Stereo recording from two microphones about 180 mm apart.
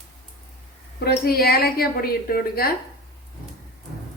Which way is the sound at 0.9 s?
60° left (ahead or behind).